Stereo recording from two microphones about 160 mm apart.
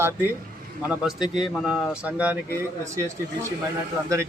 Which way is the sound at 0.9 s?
5° right (ahead or behind).